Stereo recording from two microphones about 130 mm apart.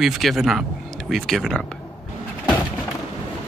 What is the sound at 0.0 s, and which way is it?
Speech, centre (ahead or behind).